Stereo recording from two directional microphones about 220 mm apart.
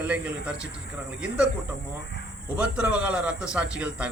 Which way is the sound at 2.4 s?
5° right (ahead or behind).